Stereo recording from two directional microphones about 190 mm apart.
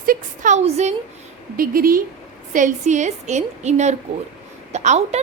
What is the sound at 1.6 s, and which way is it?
A woman's voice, 50° right (ahead or behind).